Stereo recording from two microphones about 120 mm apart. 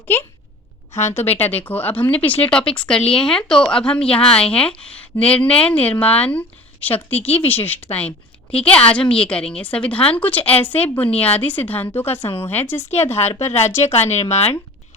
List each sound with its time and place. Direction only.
1.5 s a woman's voice: 15° left (ahead or behind)
14.1 s speech: 65° left (ahead or behind)